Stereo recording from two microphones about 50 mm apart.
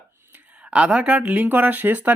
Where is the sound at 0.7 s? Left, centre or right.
Right.